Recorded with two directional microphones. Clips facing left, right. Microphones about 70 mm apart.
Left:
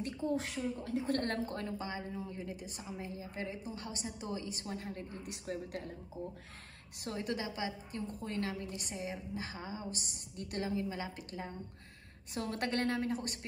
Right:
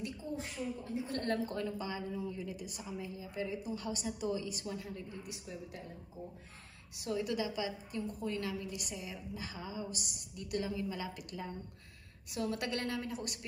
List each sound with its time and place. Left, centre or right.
0.2 s a woman's voice: left
7.0 s a woman's voice: left